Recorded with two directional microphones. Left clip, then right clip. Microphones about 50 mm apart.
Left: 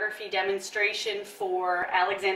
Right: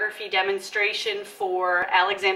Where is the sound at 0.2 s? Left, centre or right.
Centre.